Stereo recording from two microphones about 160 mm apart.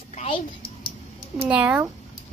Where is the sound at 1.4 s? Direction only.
10° right (ahead or behind).